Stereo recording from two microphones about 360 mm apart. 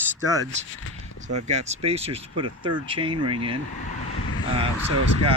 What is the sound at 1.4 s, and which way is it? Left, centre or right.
Speech, centre.